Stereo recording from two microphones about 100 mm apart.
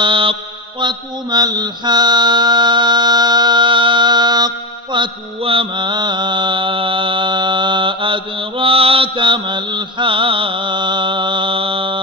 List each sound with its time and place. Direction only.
0.0 s mantra: 60° right (ahead or behind)
4.9 s mantra: 60° right (ahead or behind)